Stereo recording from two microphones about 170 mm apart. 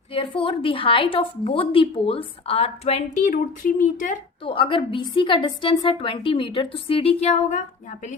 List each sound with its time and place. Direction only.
0.1 s a woman's voice: 30° left (ahead or behind); by 4.2 s 50° left (ahead or behind)
4.4 s a woman's voice: 30° left (ahead or behind)